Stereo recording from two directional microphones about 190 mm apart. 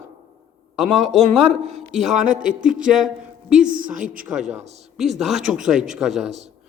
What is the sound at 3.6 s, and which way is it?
Speech, 45° right (ahead or behind).